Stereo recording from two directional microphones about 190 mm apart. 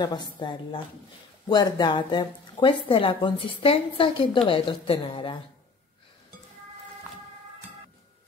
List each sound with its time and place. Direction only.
0.0 s speech: 25° left (ahead or behind)